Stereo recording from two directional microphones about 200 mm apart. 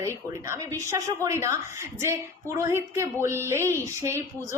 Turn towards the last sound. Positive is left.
turn(degrees=-15)  # may be behind; listen again after turning